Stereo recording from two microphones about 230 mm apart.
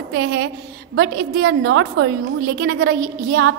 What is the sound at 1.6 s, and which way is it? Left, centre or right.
A woman's voice, right.